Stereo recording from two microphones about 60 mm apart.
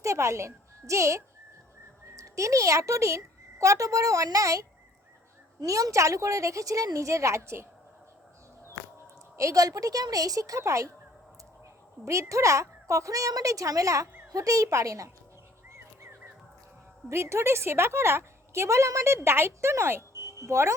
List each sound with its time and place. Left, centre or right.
0.0 s a woman's voice: right
5.5 s a woman's voice: right
9.4 s a woman's voice: right
10.6 s a woman's voice: right
12.3 s a woman's voice: right
17.1 s a woman's voice: right